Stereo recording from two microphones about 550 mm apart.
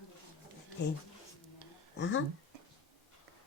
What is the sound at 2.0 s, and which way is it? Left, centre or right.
Speech, left.